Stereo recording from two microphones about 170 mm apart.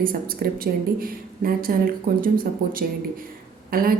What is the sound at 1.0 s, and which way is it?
A woman's voice, 60° right (ahead or behind).